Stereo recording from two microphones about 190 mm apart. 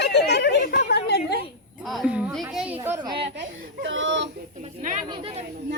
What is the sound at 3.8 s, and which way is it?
Speech, 90° right.